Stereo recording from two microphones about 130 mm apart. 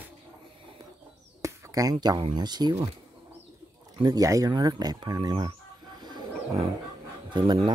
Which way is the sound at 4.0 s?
30° right (ahead or behind).